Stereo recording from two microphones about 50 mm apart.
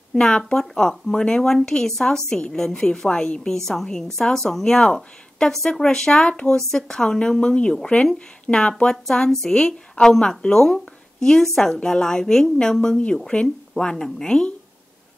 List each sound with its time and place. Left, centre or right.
0.1 s speech: centre
9.0 s speech: centre